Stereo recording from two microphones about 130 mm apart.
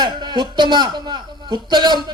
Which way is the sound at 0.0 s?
35° right (ahead or behind).